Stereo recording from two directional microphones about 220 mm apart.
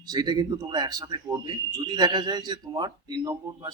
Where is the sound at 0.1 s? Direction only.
20° right (ahead or behind).